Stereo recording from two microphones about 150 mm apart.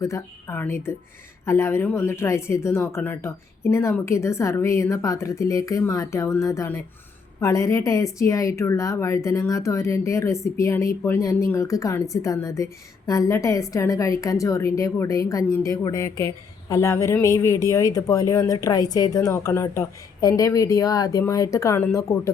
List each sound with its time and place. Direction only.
0.0 s a woman's voice: 20° left (ahead or behind)